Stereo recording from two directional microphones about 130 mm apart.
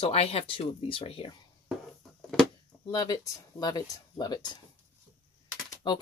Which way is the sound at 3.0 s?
30° left (ahead or behind).